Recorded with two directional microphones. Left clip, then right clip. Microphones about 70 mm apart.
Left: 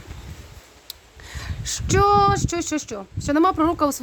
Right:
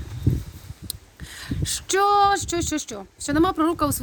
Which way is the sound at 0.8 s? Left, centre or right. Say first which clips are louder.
Right 1 dB; left.